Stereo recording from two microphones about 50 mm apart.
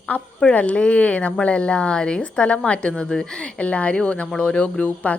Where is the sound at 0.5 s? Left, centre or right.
Left.